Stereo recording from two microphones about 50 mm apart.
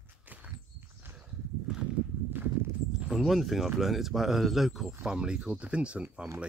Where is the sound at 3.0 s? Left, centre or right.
Centre.